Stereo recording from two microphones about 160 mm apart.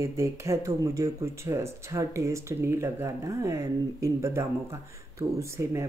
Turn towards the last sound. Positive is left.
turn(degrees=-20)  # may be behind; listen again after turning